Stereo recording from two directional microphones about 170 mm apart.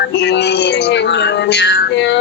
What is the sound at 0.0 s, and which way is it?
Speech, 80° left.